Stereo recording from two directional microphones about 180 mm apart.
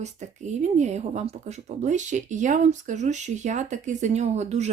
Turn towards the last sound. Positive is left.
turn(degrees=-40)  # may be behind; listen again after turning